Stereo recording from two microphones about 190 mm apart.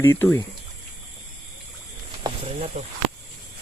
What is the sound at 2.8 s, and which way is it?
Speech, 35° right (ahead or behind).